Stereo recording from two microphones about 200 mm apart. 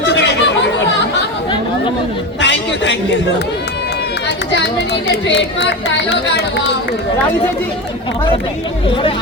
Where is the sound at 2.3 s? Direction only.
65° left (ahead or behind).